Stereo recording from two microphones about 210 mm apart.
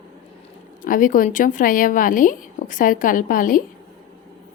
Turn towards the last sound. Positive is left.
turn(degrees=40)  # may be behind; listen again after turning